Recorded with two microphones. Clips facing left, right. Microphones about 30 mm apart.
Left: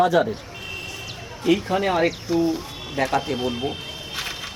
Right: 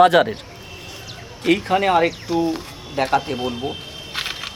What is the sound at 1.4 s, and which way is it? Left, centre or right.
Speech, right.